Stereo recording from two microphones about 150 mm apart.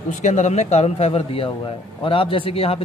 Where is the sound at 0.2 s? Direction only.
50° left (ahead or behind).